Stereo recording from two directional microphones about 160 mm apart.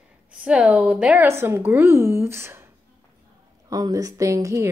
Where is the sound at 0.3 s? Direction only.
5° right (ahead or behind).